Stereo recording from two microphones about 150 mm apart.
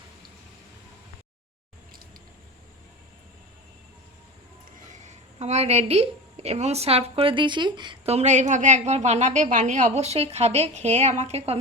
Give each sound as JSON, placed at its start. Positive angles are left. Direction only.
{"t": 4.9, "sound": "a woman's voice", "side_deg": -50}
{"t": 8.0, "sound": "a woman's voice", "side_deg": -45}